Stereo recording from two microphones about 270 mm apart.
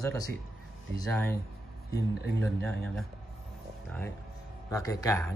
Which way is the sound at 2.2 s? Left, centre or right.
Right.